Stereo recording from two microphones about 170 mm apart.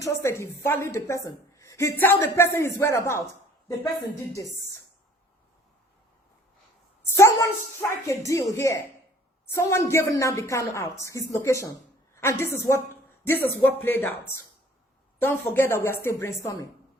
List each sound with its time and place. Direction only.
0.0 s a woman's voice: 15° left (ahead or behind)
7.2 s a woman's voice: 20° left (ahead or behind)
15.2 s a woman's voice: 15° left (ahead or behind)